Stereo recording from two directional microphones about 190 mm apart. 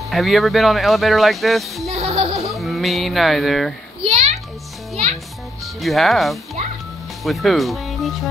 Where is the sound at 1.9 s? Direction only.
35° right (ahead or behind).